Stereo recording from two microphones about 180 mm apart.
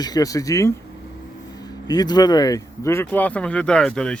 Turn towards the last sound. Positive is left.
turn(degrees=5)  # may be behind; listen again after turning